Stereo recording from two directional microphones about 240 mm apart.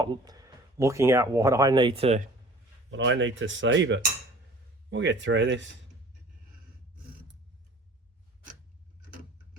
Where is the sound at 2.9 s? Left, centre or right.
Right.